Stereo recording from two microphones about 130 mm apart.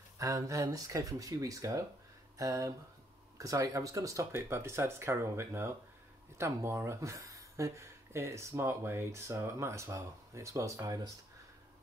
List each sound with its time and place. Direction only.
0.2 s speech: 25° right (ahead or behind)